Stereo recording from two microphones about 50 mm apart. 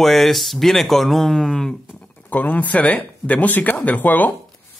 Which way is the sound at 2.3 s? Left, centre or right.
Left.